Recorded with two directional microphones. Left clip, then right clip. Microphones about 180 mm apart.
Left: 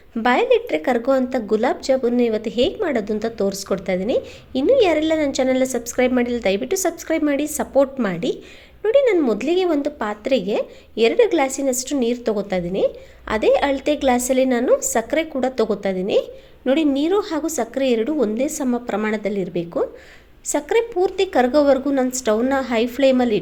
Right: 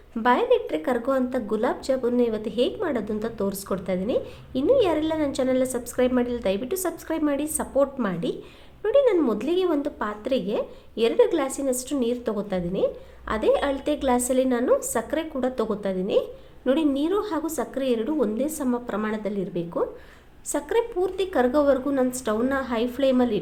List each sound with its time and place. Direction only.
0.2 s a woman's voice: 20° left (ahead or behind)